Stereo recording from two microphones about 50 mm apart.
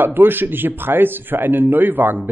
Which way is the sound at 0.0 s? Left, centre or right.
Right.